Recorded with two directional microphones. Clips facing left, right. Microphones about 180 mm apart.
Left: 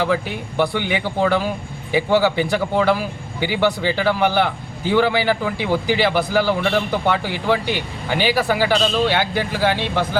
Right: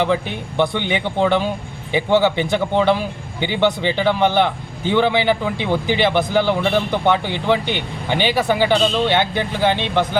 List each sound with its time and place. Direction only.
0.0 s a man's voice: 20° right (ahead or behind)